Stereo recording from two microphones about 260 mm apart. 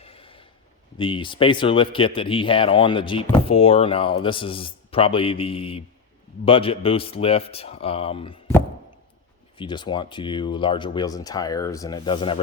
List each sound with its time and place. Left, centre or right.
0.0 s a sound: left
0.9 s speech: centre
9.6 s speech: centre